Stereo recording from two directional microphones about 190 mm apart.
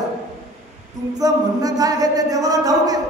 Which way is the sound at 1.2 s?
20° right (ahead or behind).